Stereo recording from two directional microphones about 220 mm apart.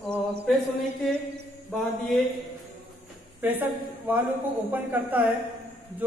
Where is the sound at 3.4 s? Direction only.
10° right (ahead or behind).